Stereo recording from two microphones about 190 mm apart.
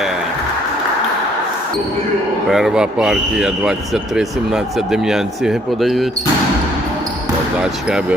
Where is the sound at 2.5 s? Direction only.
Centre (ahead or behind).